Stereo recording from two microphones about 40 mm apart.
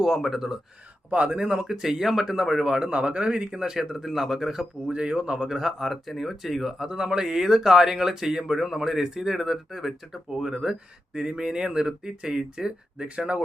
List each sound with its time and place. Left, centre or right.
0.0 s speech: centre
1.1 s speech: right; by 2.5 s centre
2.6 s speech: right
4.9 s speech: right
5.5 s speech: centre
10.2 s speech: centre